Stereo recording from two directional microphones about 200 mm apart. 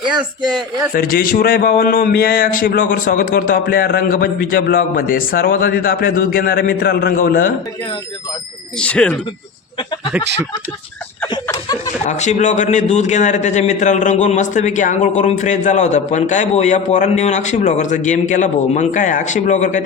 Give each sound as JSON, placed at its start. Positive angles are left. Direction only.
{"t": 0.9, "sound": "a man's voice", "side_deg": 45}
{"t": 8.8, "sound": "speech", "side_deg": 5}
{"t": 11.4, "sound": "speech", "side_deg": 20}
{"t": 12.0, "sound": "a man's voice", "side_deg": 35}